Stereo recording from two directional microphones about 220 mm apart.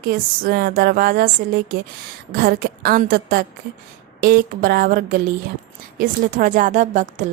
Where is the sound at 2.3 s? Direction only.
40° right (ahead or behind).